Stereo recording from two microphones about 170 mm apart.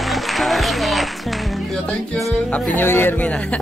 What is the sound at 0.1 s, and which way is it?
Music, centre (ahead or behind).